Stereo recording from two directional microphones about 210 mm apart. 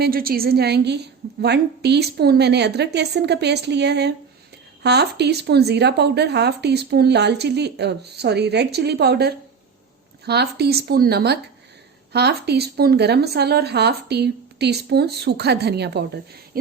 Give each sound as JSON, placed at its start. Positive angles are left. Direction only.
{"t": 0.0, "sound": "speech", "side_deg": -45}